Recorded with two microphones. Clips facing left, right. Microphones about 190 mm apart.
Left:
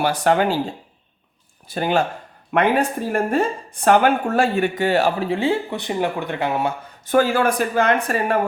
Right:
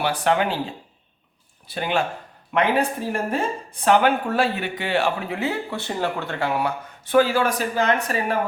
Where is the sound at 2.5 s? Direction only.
55° left (ahead or behind); by 6.7 s 20° left (ahead or behind).